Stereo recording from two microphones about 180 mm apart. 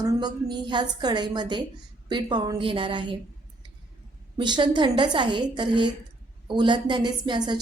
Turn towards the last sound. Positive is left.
turn(degrees=-25)  # may be behind; listen again after turning